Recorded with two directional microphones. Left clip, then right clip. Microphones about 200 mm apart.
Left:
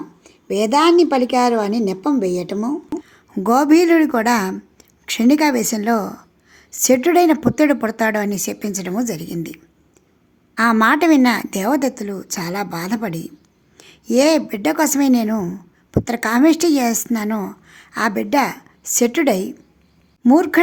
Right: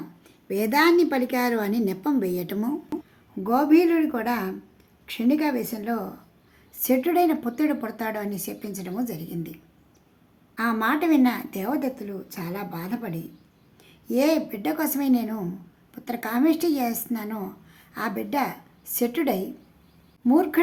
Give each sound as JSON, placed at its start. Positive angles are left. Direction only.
{"t": 0.3, "sound": "a woman's voice", "side_deg": 15}
{"t": 3.1, "sound": "a woman's voice", "side_deg": 50}